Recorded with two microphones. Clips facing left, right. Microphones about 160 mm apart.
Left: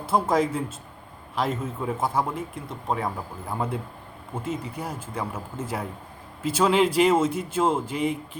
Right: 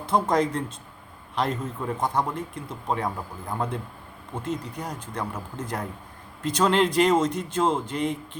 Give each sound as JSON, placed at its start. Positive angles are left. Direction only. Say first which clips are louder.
{"t": 0.0, "sound": "speech", "louder": "even", "side_deg": 5}